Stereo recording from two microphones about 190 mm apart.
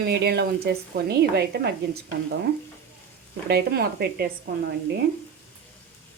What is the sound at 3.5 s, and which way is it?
Speech, 55° right (ahead or behind).